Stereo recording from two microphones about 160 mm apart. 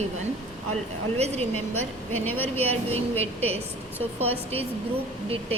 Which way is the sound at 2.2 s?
10° left (ahead or behind).